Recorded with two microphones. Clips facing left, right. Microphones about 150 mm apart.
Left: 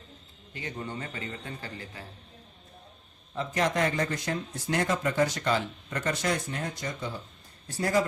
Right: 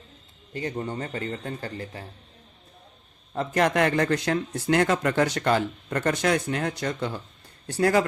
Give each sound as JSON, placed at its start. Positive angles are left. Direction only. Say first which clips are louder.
{"t": 0.5, "sound": "a man's voice", "louder": "right 7 dB", "side_deg": -40}
{"t": 3.3, "sound": "speech", "louder": "right 5 dB", "side_deg": -60}